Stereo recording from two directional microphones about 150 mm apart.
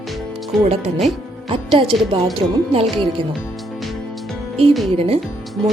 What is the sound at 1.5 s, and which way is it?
Speech, 35° right (ahead or behind).